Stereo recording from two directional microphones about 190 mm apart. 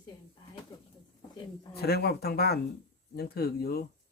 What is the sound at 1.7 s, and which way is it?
Speech, 55° left (ahead or behind).